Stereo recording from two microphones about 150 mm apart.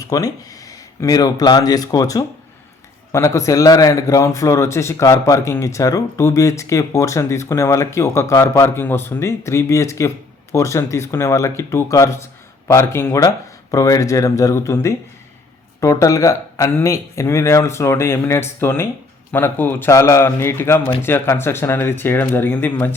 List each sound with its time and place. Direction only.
0.1 s a man's voice: 25° left (ahead or behind)